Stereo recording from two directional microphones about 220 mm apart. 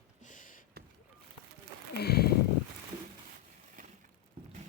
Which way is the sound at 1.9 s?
45° left (ahead or behind).